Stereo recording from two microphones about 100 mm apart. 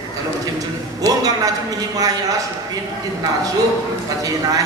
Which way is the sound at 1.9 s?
35° right (ahead or behind).